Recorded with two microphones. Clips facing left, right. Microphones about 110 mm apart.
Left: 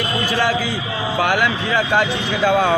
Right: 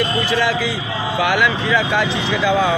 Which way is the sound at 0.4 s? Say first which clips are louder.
Even; 45° left (ahead or behind).